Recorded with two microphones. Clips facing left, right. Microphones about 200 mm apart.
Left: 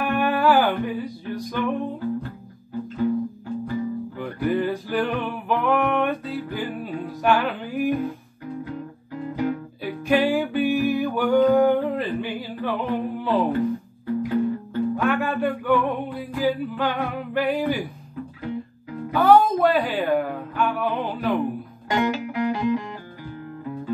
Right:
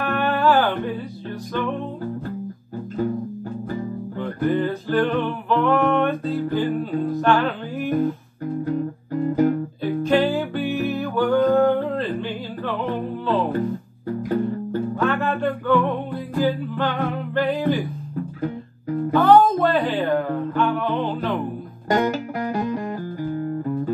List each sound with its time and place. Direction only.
0.0 s music: 10° left (ahead or behind)
4.2 s music: 10° left (ahead or behind)
8.6 s music: 45° right (ahead or behind)
9.8 s music: 10° left (ahead or behind)
14.2 s music: 45° right (ahead or behind)
15.0 s music: 10° left (ahead or behind)
19.1 s music: 10° left (ahead or behind)
21.8 s music: 45° right (ahead or behind)